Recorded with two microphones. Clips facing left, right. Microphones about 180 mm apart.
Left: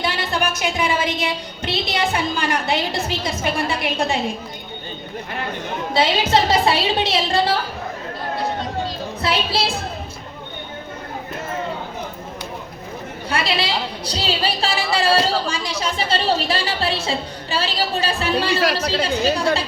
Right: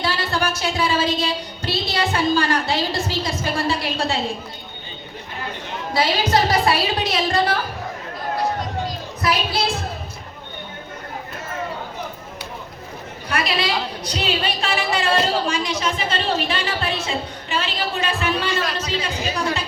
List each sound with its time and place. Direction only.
0.0 s a woman's voice: 20° left (ahead or behind)
5.9 s a woman's voice: 25° left (ahead or behind)
9.2 s a woman's voice: 30° left (ahead or behind)
13.3 s a woman's voice: 30° left (ahead or behind)
18.6 s speech: 70° left (ahead or behind)